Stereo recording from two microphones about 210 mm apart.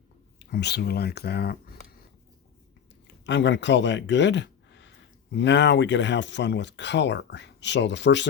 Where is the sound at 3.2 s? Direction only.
60° left (ahead or behind).